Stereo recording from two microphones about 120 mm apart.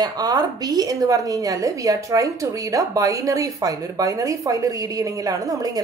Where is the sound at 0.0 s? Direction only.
35° right (ahead or behind).